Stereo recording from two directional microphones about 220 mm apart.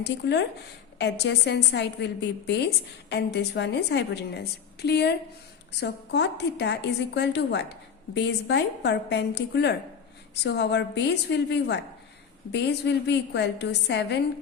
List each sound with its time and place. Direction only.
0.0 s a woman's voice: 50° left (ahead or behind)